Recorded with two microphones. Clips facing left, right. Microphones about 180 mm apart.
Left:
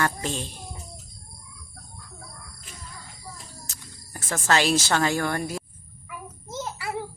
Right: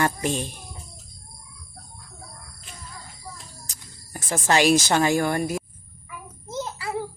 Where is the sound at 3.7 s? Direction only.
15° right (ahead or behind).